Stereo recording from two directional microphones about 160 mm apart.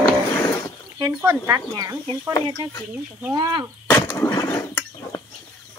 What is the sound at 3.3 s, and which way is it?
Speech, 25° right (ahead or behind).